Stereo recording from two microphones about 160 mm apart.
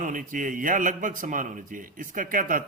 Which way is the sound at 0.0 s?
55° right (ahead or behind).